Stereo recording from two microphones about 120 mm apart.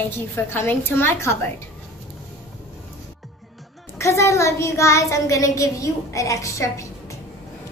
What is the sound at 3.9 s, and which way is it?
A child's voice, 25° left (ahead or behind).